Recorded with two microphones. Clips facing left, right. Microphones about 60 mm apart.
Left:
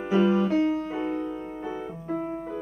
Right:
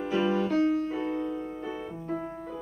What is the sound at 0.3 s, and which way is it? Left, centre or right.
Music, left.